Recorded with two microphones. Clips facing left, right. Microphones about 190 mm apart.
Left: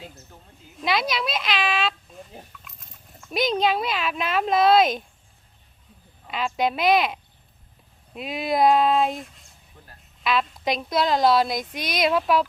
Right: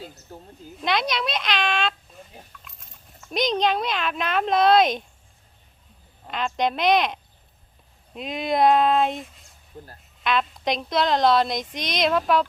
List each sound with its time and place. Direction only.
0.3 s a sound: 40° right (ahead or behind)
0.8 s speech: 5° left (ahead or behind)
6.2 s speech: 5° left (ahead or behind)
9.7 s speech: 35° right (ahead or behind)
10.2 s speech: centre (ahead or behind)